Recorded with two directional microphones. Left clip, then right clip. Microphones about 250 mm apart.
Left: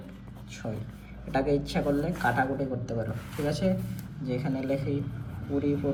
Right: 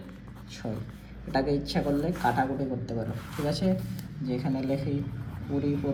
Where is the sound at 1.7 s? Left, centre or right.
Centre.